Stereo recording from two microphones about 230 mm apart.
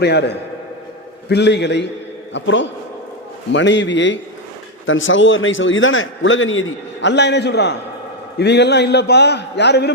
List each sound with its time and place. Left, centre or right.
0.0 s a man's voice: left